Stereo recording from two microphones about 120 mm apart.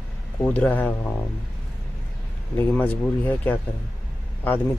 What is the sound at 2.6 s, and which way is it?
Speech, 15° left (ahead or behind).